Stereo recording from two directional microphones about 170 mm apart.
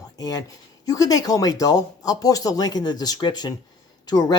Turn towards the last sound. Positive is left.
turn(degrees=25)  # may be behind; listen again after turning